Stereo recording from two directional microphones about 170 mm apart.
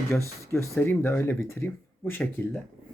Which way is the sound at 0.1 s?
15° left (ahead or behind).